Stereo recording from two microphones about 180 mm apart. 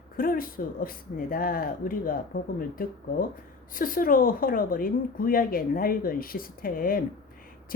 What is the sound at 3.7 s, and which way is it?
A woman's voice, 50° left (ahead or behind).